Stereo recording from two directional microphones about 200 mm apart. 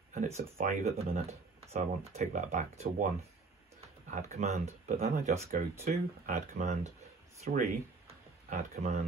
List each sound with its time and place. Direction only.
0.1 s speech: 45° right (ahead or behind)
4.1 s speech: 35° right (ahead or behind)